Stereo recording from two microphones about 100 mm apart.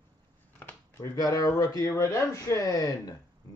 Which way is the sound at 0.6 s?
20° left (ahead or behind).